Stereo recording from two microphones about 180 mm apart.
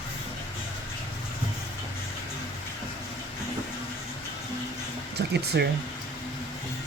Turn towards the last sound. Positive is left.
turn(degrees=-65)  # may be behind; listen again after turning